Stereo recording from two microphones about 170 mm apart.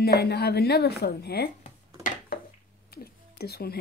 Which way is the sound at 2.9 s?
65° left (ahead or behind).